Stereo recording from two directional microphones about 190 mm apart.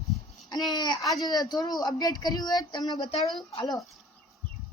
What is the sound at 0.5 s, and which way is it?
Speech, 20° left (ahead or behind).